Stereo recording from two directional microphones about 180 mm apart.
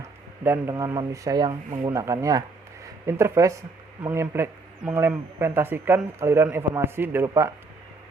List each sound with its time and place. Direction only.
0.4 s a man's voice: 15° right (ahead or behind)